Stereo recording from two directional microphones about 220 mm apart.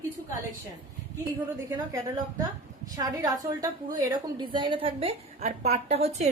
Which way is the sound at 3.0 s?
15° right (ahead or behind).